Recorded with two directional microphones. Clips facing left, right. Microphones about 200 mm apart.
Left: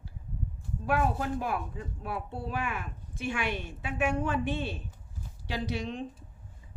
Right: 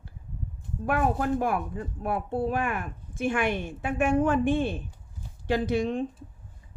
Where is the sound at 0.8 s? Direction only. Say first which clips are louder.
Right 3 dB; 55° right (ahead or behind).